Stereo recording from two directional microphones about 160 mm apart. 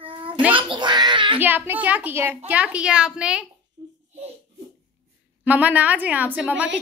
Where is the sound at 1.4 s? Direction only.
10° right (ahead or behind).